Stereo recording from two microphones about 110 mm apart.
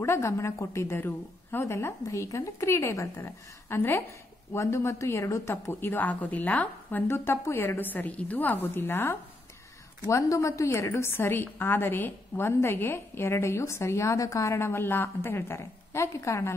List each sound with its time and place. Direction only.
0.0 s a woman's voice: 25° left (ahead or behind)